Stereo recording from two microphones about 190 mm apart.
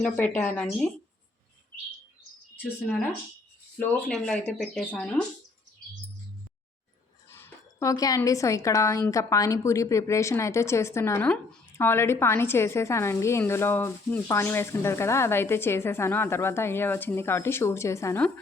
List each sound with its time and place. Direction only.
0.0 s a woman's voice: 5° left (ahead or behind)
3.8 s speech: 5° left (ahead or behind)
7.3 s a woman's voice: 10° left (ahead or behind)